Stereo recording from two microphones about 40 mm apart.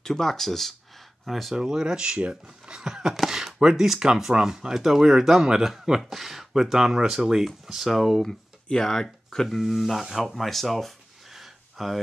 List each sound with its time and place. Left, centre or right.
0.0 s speech: centre
1.5 s speech: centre
8.6 s speech: centre
11.3 s a sound: centre